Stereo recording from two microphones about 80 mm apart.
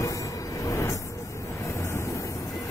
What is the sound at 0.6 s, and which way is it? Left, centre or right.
Vehicle, left.